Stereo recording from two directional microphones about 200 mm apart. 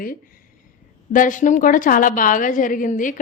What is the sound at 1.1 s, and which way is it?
A woman's voice, 40° left (ahead or behind).